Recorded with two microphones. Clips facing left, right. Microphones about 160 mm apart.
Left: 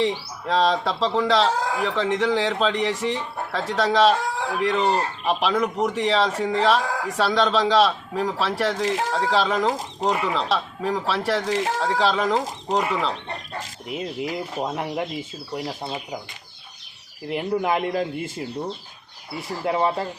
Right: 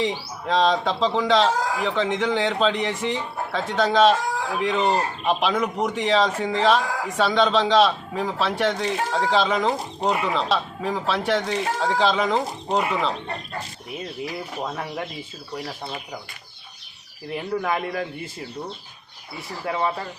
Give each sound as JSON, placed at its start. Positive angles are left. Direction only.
{"t": 0.0, "sound": "speech", "side_deg": 5}
{"t": 14.3, "sound": "speech", "side_deg": 20}
{"t": 17.3, "sound": "a man's voice", "side_deg": 20}
{"t": 19.6, "sound": "a man's voice", "side_deg": 25}